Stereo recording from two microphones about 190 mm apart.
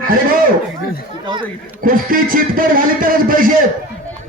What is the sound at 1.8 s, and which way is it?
A man's voice, 50° right (ahead or behind).